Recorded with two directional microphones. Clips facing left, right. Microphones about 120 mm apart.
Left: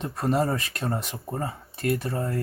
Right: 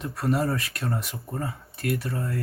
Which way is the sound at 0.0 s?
25° left (ahead or behind).